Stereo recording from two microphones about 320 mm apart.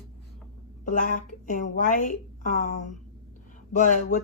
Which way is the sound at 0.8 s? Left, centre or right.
Left.